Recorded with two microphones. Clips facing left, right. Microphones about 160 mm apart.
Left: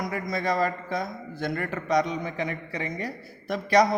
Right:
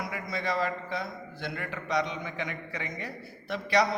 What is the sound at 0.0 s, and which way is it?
A man's voice, 45° left (ahead or behind).